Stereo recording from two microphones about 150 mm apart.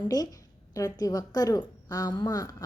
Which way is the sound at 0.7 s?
25° left (ahead or behind).